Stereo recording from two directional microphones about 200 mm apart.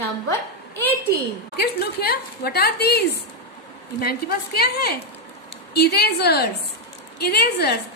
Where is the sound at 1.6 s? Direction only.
55° left (ahead or behind).